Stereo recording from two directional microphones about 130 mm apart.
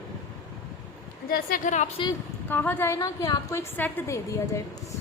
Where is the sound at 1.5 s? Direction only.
70° left (ahead or behind).